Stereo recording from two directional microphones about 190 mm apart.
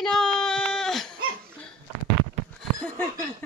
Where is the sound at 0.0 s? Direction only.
5° left (ahead or behind).